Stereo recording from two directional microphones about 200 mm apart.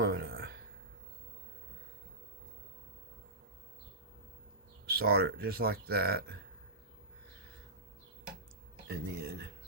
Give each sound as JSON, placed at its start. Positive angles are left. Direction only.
{"t": 0.0, "sound": "a sound", "side_deg": -50}
{"t": 4.9, "sound": "speech", "side_deg": -50}
{"t": 8.9, "sound": "speech", "side_deg": -50}